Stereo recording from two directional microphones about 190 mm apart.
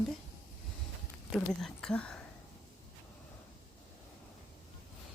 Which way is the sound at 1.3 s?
5° left (ahead or behind).